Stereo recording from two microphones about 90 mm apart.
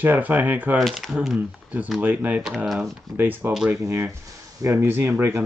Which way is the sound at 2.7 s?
Centre (ahead or behind).